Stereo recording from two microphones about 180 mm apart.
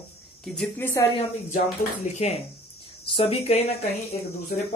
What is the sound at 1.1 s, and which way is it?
Speech, 40° left (ahead or behind).